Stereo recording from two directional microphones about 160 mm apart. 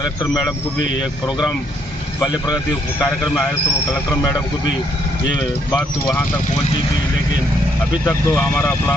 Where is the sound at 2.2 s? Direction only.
25° left (ahead or behind).